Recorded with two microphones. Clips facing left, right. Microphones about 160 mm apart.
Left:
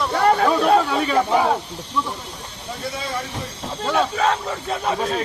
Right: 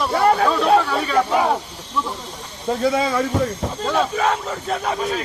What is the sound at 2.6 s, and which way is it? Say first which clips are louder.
Speech: right 11 dB; 90° right.